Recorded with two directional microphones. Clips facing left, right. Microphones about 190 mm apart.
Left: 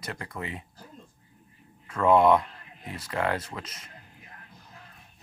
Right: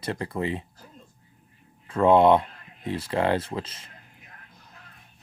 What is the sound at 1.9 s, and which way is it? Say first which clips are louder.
Speech: right 3 dB; 30° right (ahead or behind).